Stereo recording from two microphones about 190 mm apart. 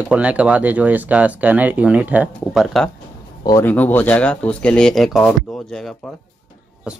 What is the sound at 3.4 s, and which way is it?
Speech, 20° left (ahead or behind).